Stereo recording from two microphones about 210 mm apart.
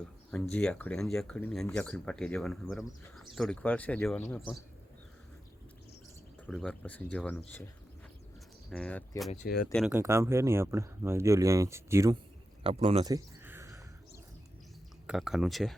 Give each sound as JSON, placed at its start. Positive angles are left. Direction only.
{"t": 0.5, "sound": "speech", "side_deg": 5}
{"t": 6.4, "sound": "speech", "side_deg": 5}
{"t": 8.7, "sound": "speech", "side_deg": 5}
{"t": 9.9, "sound": "speech", "side_deg": -15}
{"t": 12.6, "sound": "a sound", "side_deg": -30}
{"t": 15.0, "sound": "speech", "side_deg": -5}